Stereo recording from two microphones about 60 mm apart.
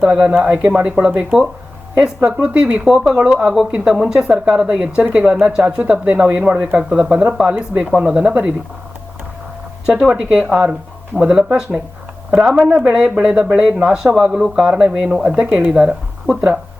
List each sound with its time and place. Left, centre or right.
0.0 s a woman's voice: centre
9.8 s a woman's voice: centre